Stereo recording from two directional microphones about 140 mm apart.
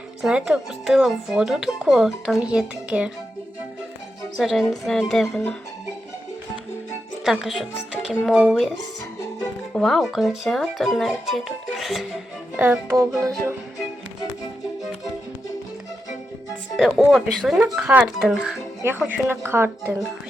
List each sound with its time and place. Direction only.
0.2 s speech: 5° right (ahead or behind)
4.4 s speech: centre (ahead or behind)
7.3 s speech: centre (ahead or behind)
9.7 s speech: centre (ahead or behind)
12.5 s speech: 15° right (ahead or behind)
17.1 s speech: centre (ahead or behind)
18.8 s speech: 15° right (ahead or behind)